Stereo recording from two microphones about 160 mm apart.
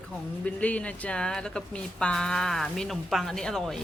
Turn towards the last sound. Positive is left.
turn(degrees=5)  # may be behind; listen again after turning